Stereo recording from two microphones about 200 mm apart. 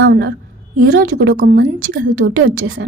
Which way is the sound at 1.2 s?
70° right (ahead or behind).